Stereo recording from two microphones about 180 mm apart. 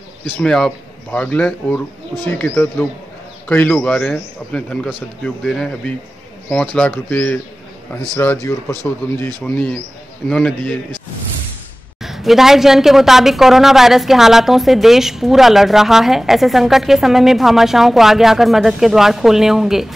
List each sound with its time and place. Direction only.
0.4 s a woman's voice: 5° left (ahead or behind)
10.3 s a woman's voice: 5° left (ahead or behind)
12.0 s a woman's voice: centre (ahead or behind)